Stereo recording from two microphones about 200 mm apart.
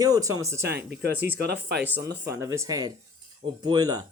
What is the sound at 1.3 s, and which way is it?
Speech, 55° right (ahead or behind).